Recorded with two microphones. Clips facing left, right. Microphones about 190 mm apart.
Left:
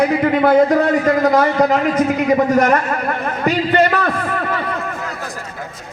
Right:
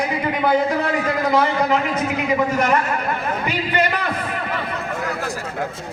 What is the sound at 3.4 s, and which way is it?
Speech, 45° left (ahead or behind).